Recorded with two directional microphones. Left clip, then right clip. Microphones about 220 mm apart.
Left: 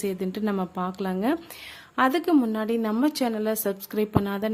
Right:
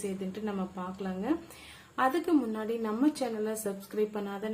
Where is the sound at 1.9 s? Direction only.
45° left (ahead or behind).